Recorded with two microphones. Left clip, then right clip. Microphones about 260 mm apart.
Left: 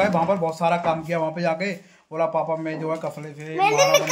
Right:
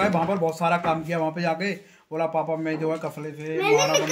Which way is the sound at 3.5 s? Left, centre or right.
Left.